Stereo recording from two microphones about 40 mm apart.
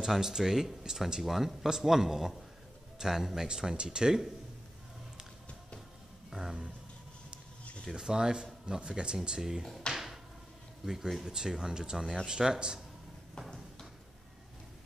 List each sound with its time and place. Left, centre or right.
0.0 s speech: centre
3.7 s speech: right
6.3 s speech: centre
7.9 s speech: centre
10.9 s speech: centre